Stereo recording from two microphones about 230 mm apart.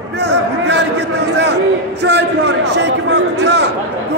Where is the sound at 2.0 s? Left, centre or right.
Right.